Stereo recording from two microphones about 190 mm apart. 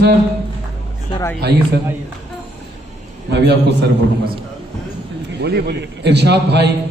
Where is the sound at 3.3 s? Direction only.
60° right (ahead or behind).